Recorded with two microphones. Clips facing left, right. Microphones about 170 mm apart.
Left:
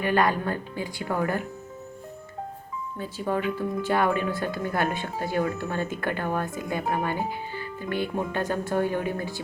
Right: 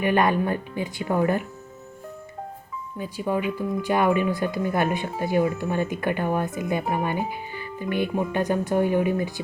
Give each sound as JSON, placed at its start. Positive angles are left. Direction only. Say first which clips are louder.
{"t": 0.0, "sound": "speech", "louder": "right 3 dB", "side_deg": -20}
{"t": 3.0, "sound": "speech", "louder": "right 2 dB", "side_deg": -15}